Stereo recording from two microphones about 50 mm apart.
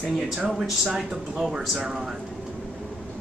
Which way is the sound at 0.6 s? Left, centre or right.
Centre.